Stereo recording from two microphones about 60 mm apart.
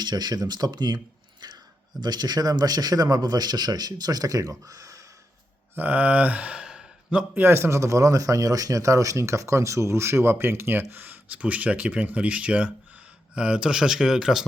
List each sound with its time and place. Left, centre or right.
0.6 s speech: right
1.9 s speech: right
5.7 s speech: right; by 7.3 s centre
7.3 s speech: right; by 14.4 s centre